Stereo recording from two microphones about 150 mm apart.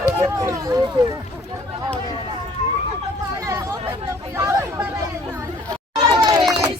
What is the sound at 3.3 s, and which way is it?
Chatter, 20° right (ahead or behind).